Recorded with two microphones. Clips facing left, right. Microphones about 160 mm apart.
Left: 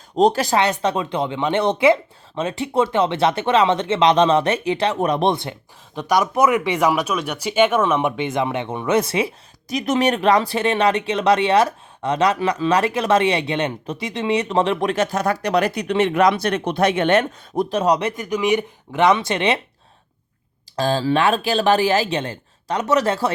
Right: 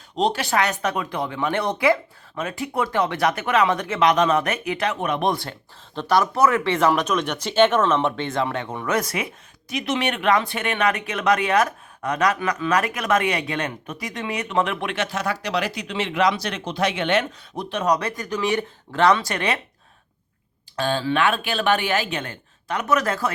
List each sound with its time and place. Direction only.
0.2 s speech: 40° left (ahead or behind)
0.5 s speech: 30° left (ahead or behind)
5.3 s speech: 20° left (ahead or behind)
20.7 s speech: 35° left (ahead or behind)